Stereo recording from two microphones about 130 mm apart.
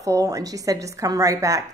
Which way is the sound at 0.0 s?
25° right (ahead or behind).